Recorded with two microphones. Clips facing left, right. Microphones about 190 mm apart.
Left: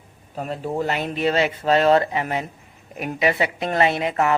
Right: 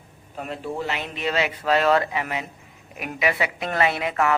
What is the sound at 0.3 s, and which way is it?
Speech, 40° left (ahead or behind).